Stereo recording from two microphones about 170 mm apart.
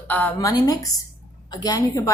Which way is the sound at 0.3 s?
20° left (ahead or behind).